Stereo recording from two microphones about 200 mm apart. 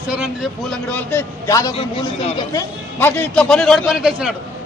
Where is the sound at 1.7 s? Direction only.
30° left (ahead or behind).